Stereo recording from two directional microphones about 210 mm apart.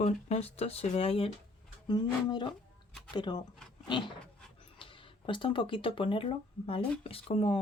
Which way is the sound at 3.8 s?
25° left (ahead or behind).